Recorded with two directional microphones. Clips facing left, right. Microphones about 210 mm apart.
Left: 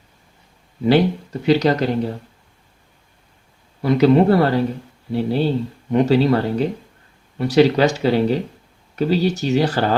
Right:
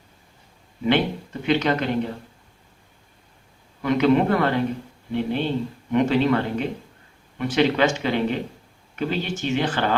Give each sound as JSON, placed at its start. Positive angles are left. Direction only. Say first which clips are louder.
{"t": 0.9, "sound": "speech", "louder": "left 5 dB", "side_deg": 35}
{"t": 3.8, "sound": "speech", "louder": "left 5 dB", "side_deg": 35}